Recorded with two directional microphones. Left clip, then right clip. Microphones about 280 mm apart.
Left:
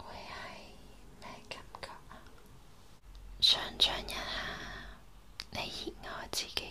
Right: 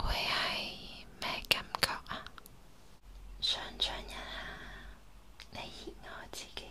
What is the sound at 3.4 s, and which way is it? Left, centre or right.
Whispering, centre.